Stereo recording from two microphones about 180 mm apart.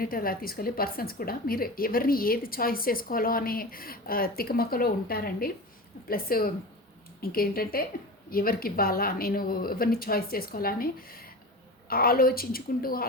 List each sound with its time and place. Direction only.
0.0 s a woman's voice: 55° left (ahead or behind)
11.9 s a woman's voice: 55° left (ahead or behind)